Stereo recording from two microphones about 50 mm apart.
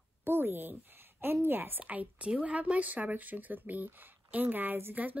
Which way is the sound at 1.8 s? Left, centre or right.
Right.